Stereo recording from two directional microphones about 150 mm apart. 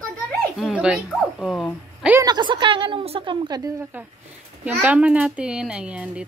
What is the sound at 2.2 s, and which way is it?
A woman's voice, 30° right (ahead or behind).